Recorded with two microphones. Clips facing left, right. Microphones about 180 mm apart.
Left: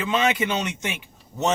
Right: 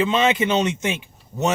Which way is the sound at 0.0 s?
20° right (ahead or behind).